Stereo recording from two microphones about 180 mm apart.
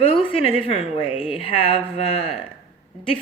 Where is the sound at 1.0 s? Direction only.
5° right (ahead or behind).